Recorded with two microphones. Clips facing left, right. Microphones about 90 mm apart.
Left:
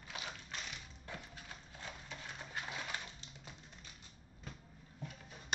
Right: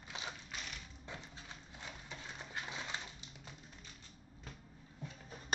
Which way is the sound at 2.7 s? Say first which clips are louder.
Even; 20° right (ahead or behind).